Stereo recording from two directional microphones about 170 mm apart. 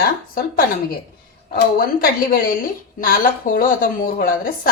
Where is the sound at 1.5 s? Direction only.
60° left (ahead or behind).